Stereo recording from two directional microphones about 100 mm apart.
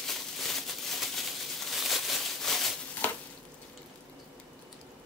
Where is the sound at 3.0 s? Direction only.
20° left (ahead or behind).